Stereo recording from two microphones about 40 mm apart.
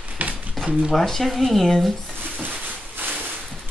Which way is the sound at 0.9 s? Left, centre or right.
Centre.